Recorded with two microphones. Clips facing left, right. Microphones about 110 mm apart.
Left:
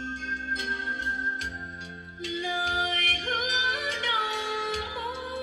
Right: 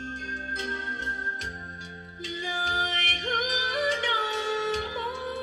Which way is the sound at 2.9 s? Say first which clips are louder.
Even; 35° left (ahead or behind).